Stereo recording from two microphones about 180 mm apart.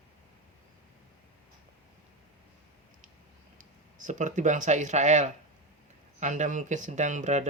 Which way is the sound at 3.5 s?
45° right (ahead or behind).